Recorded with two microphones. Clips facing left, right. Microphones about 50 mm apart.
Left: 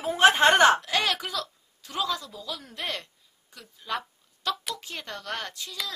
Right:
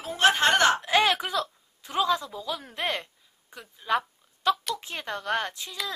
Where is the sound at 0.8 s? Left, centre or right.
Right.